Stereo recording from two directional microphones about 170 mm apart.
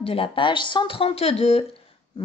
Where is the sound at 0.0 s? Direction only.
35° left (ahead or behind).